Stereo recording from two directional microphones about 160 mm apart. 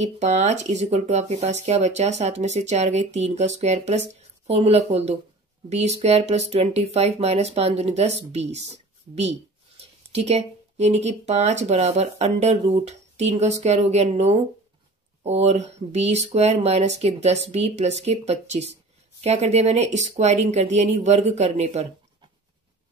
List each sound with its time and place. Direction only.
0.0 s speech: 45° right (ahead or behind)